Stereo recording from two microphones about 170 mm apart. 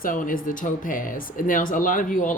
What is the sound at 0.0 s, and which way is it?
Speech, 55° left (ahead or behind).